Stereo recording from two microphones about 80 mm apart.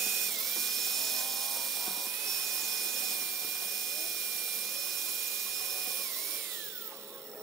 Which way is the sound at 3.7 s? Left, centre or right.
Centre.